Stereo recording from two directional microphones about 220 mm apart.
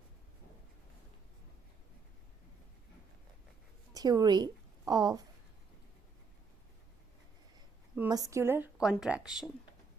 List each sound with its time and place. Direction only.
3.9 s a woman's voice: 15° right (ahead or behind)
7.9 s a woman's voice: 15° right (ahead or behind)